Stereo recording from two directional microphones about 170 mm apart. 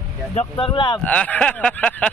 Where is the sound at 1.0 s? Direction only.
10° left (ahead or behind).